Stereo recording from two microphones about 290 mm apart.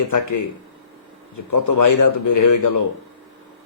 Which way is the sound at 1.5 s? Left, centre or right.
Left.